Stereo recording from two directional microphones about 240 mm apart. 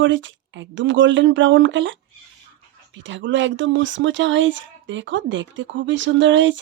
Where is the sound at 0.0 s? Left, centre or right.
Right.